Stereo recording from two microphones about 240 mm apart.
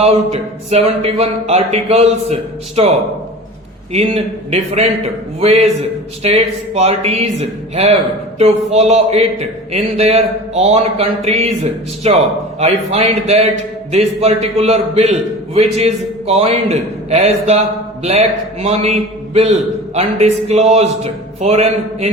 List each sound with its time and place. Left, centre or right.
0.0 s speech: right
3.9 s speech: right
8.4 s speech: right